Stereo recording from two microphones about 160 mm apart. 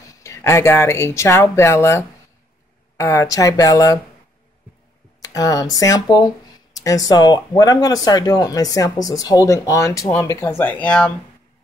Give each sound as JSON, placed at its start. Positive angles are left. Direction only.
{"t": 0.1, "sound": "speech", "side_deg": 20}
{"t": 5.2, "sound": "speech", "side_deg": 20}